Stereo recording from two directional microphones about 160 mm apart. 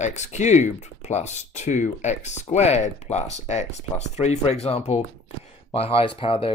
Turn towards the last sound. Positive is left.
turn(degrees=35)  # may be behind; listen again after turning